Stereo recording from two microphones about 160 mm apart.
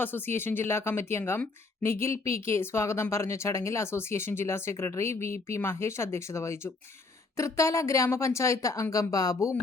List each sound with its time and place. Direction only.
0.0 s a woman's voice: 15° left (ahead or behind)